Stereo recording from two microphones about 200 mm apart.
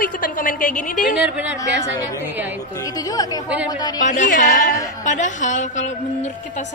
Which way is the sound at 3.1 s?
20° left (ahead or behind).